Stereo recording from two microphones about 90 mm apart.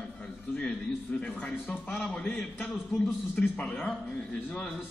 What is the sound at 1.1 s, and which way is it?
Speech, 15° left (ahead or behind).